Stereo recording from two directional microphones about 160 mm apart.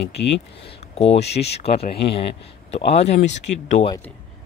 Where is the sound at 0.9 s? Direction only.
40° left (ahead or behind).